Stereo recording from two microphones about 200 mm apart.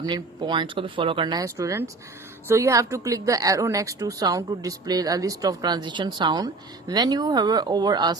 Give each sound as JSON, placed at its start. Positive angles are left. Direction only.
{"t": 0.0, "sound": "speech", "side_deg": -20}